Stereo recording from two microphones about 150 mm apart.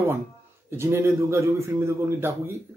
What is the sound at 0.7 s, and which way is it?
Speech, 15° right (ahead or behind).